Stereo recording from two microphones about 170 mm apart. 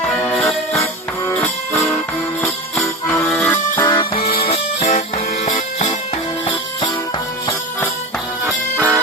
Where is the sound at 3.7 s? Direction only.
20° left (ahead or behind).